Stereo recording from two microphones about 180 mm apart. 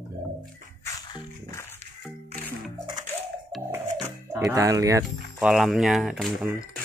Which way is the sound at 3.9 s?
40° right (ahead or behind).